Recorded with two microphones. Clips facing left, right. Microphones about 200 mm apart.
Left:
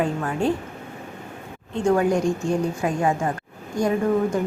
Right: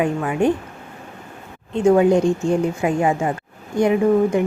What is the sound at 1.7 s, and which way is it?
A woman's voice, 20° right (ahead or behind).